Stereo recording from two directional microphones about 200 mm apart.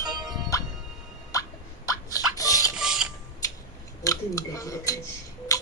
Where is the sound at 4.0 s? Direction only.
15° left (ahead or behind).